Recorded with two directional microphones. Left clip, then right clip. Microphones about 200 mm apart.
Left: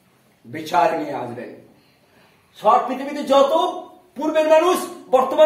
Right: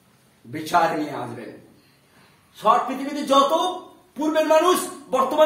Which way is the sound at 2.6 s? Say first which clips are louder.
Left 3 dB; centre (ahead or behind).